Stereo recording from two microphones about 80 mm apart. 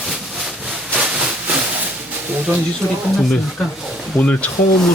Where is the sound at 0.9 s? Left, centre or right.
Centre.